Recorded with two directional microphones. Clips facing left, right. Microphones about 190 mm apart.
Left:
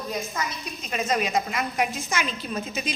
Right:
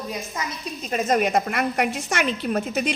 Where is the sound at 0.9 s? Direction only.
50° right (ahead or behind).